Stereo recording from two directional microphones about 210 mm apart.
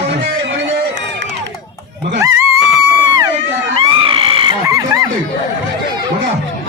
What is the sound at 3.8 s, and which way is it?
Screaming, 25° right (ahead or behind).